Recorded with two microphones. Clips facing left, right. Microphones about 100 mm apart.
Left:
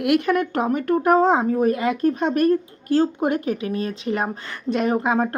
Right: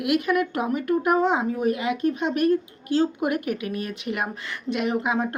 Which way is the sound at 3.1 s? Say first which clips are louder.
Left 3 dB; 30° left (ahead or behind).